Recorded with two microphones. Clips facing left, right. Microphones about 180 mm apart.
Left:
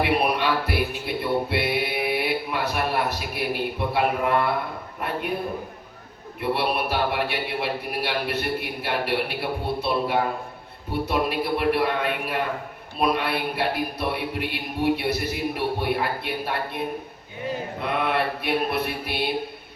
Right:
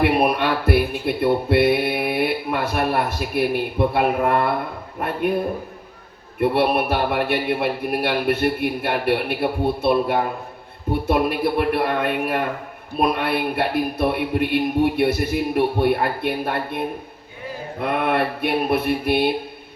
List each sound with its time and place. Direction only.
0.0 s music: 50° right (ahead or behind)
6.4 s speech: 55° right (ahead or behind)